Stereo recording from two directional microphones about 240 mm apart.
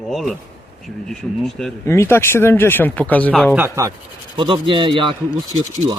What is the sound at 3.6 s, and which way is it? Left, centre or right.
Speech, centre.